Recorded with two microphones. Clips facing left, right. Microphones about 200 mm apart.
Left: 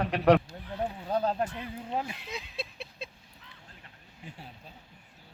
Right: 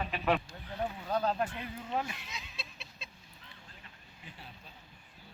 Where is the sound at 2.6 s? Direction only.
55° left (ahead or behind).